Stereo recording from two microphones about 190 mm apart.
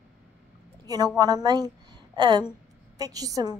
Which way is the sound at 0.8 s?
20° right (ahead or behind).